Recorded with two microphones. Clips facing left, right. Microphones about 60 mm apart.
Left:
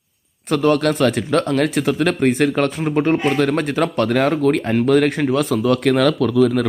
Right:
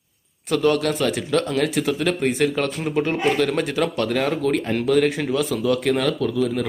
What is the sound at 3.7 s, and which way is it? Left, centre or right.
Speech, left.